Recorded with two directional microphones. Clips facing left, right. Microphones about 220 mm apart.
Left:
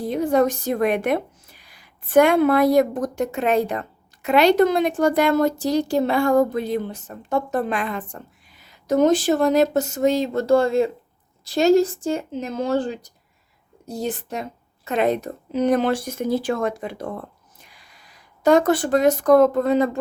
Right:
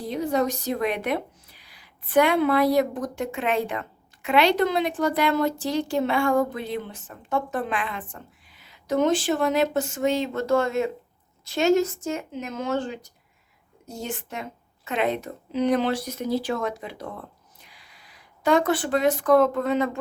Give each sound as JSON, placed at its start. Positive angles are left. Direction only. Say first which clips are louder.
{"t": 0.0, "sound": "a woman's voice", "louder": "left 5 dB", "side_deg": 50}